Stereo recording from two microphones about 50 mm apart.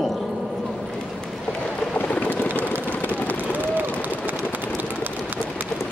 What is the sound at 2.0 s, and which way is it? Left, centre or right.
Boat, left.